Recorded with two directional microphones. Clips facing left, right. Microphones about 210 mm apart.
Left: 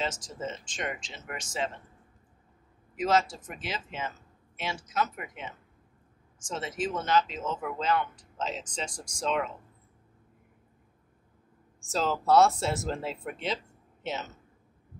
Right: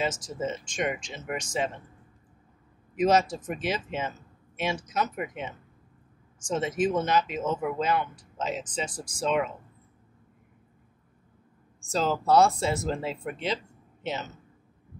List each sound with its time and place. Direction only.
0.0 s speech: 10° right (ahead or behind)
3.0 s speech: 20° right (ahead or behind)
11.9 s speech: centre (ahead or behind)